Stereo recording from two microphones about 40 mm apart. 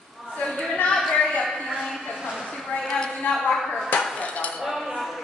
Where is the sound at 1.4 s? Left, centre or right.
Centre.